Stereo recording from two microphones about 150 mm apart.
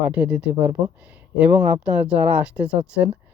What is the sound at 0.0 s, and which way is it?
Speech, 10° right (ahead or behind).